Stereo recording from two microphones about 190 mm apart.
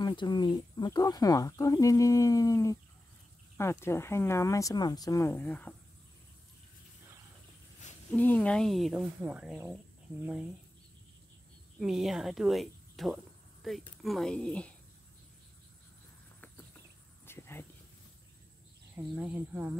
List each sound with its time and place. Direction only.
0.0 s speech: 25° left (ahead or behind)
8.1 s speech: 5° left (ahead or behind)
11.8 s speech: centre (ahead or behind)
17.3 s a sound: 10° left (ahead or behind)
18.9 s speech: 10° right (ahead or behind)